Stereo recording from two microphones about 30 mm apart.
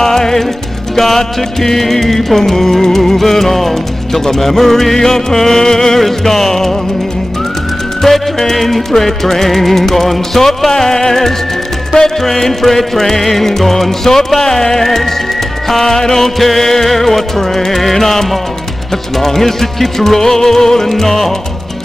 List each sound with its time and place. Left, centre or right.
0.0 s music: centre
8.0 s music: centre
10.7 s music: centre